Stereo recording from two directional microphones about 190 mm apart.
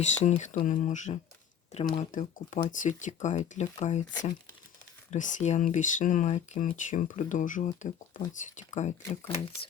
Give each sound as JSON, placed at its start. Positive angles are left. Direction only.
{"t": 0.2, "sound": "speech", "side_deg": 40}
{"t": 5.1, "sound": "speech", "side_deg": 40}